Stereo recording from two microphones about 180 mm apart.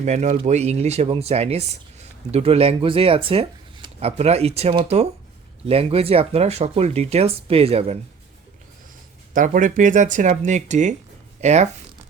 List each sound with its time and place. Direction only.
0.0 s speech: 40° right (ahead or behind)
9.3 s speech: 45° right (ahead or behind)